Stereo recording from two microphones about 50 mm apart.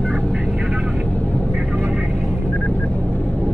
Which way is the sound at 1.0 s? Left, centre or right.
Left.